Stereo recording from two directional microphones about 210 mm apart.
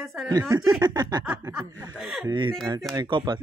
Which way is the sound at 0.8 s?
20° right (ahead or behind).